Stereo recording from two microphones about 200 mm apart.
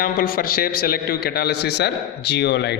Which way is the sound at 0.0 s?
45° left (ahead or behind).